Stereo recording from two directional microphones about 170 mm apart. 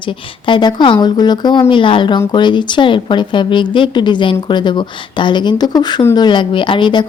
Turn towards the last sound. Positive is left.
turn(degrees=30)  # may be behind; listen again after turning